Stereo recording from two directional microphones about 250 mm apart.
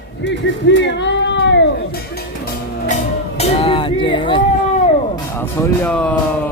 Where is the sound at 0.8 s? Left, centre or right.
Left.